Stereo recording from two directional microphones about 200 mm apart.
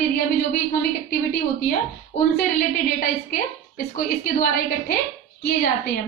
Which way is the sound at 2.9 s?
50° left (ahead or behind).